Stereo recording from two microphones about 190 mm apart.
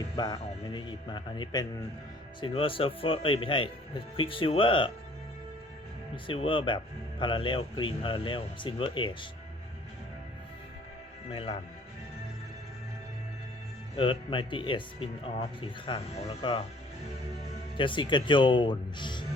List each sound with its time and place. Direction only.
0.2 s speech: 25° left (ahead or behind)
6.2 s speech: 25° left (ahead or behind)
11.3 s speech: 30° left (ahead or behind)
13.9 s speech: 25° left (ahead or behind)
17.7 s speech: 25° left (ahead or behind)